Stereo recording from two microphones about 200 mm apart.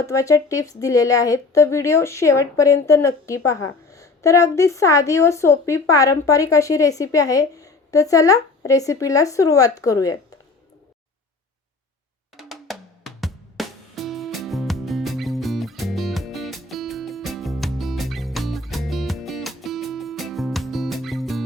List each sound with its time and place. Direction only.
0.0 s speech: 15° left (ahead or behind)
12.4 s music: centre (ahead or behind)